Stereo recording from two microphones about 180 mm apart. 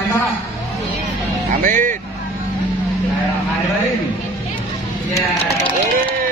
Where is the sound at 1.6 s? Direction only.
45° right (ahead or behind).